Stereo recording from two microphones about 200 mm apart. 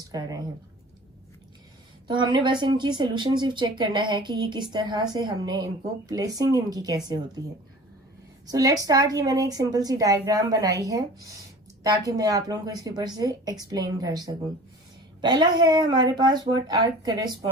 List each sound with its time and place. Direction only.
0.1 s a woman's voice: 20° right (ahead or behind)
2.0 s speech: 25° right (ahead or behind)
8.4 s a woman's voice: 20° right (ahead or behind)